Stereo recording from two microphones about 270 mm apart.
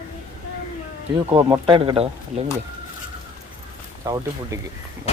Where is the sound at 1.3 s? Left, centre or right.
Centre.